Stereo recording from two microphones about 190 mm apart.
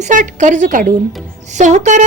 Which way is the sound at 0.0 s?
40° right (ahead or behind).